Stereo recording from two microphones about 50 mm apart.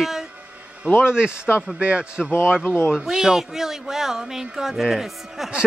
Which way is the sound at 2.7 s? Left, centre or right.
Left.